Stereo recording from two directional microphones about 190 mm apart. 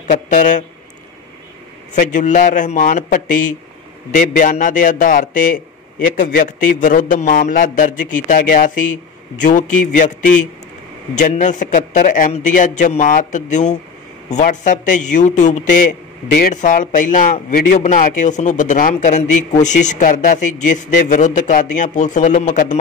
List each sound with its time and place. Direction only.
0.1 s a man's voice: 40° left (ahead or behind)
2.0 s a man's voice: 40° left (ahead or behind)